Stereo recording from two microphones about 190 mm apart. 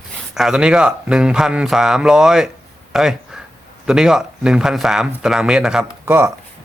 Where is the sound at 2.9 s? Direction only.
Centre (ahead or behind).